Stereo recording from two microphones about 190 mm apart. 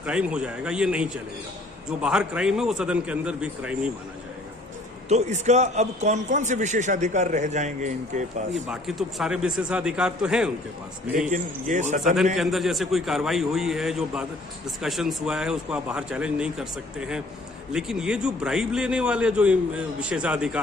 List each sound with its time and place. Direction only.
0.0 s a man's voice: 5° right (ahead or behind)
5.0 s a man's voice: 35° right (ahead or behind)
8.7 s a man's voice: centre (ahead or behind)
11.3 s a man's voice: 40° right (ahead or behind)
12.4 s a man's voice: centre (ahead or behind)